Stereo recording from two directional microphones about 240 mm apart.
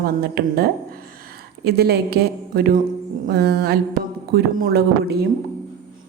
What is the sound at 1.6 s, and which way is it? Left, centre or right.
A woman's voice, right.